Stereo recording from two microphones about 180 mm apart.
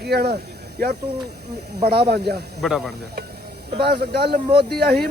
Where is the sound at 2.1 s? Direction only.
65° right (ahead or behind).